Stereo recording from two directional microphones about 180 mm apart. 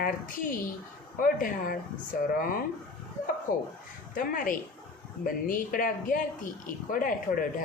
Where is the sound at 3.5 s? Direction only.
50° left (ahead or behind).